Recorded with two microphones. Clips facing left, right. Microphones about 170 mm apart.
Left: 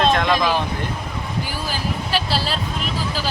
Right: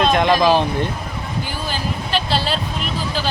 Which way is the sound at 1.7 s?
5° left (ahead or behind).